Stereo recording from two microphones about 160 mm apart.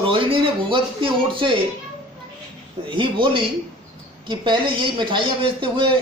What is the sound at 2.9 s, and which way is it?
A man's voice, 30° right (ahead or behind).